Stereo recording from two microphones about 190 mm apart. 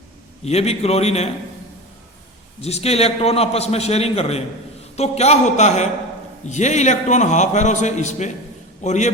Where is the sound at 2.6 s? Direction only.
35° left (ahead or behind).